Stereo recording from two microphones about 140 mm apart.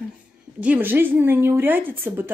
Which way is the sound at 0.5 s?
10° right (ahead or behind).